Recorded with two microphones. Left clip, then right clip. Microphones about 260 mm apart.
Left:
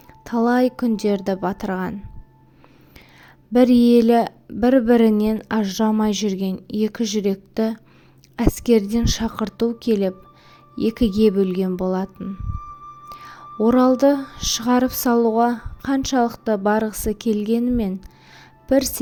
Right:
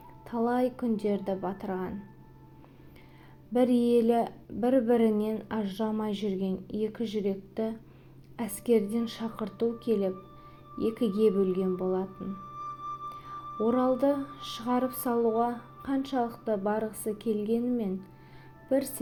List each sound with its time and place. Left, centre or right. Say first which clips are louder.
0.3 s speech: left 10 dB; left
3.5 s speech: left 10 dB; left
13.1 s music: left 3 dB; left
14.9 s speech: left 9 dB; left